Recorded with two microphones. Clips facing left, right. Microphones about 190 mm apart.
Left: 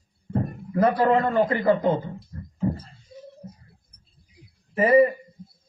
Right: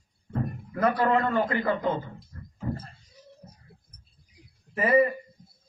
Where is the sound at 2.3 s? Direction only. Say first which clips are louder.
Left 7 dB; 25° left (ahead or behind).